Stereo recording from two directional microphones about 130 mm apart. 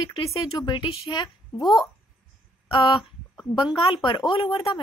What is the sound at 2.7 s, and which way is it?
A woman's voice, 40° left (ahead or behind).